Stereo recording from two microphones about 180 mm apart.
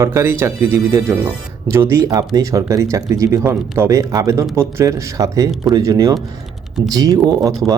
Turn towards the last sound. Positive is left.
turn(degrees=-20)  # may be behind; listen again after turning